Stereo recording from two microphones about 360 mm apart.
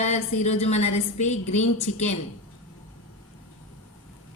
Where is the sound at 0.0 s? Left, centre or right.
Centre.